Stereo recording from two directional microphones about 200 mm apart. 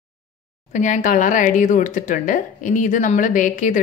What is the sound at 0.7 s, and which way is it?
A woman's voice, 40° left (ahead or behind).